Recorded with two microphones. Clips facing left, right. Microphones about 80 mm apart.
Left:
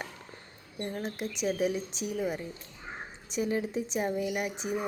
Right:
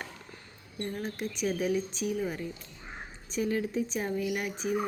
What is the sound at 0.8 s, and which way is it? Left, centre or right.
Speech, left.